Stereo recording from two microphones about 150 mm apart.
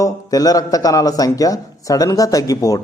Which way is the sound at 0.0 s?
25° left (ahead or behind).